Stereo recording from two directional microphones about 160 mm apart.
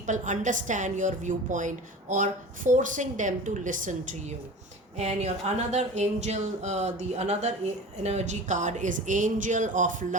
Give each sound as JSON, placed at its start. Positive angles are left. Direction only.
{"t": 0.0, "sound": "a woman's voice", "side_deg": -50}